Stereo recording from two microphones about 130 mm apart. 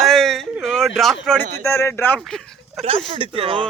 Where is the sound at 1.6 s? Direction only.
20° left (ahead or behind).